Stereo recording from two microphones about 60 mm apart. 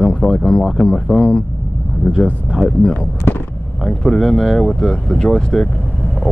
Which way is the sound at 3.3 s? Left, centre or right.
Left.